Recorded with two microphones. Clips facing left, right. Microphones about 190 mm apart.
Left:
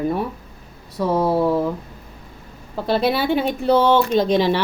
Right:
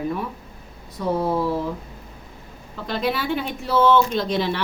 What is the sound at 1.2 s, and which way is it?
Speech, 65° left (ahead or behind).